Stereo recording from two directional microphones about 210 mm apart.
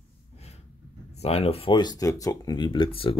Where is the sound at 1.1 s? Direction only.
30° left (ahead or behind).